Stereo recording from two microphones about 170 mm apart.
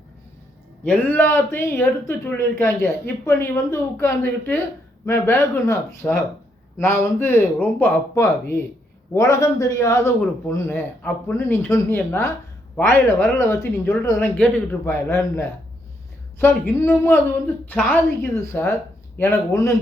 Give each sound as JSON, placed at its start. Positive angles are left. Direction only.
{"t": 0.9, "sound": "a man's voice", "side_deg": 10}